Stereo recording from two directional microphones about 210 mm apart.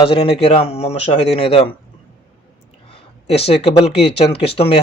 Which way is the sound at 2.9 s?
25° left (ahead or behind).